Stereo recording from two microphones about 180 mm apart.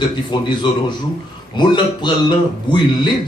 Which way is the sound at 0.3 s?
25° left (ahead or behind).